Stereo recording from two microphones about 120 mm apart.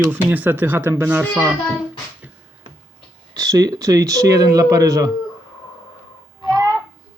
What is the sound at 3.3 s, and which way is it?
Speech, 30° right (ahead or behind).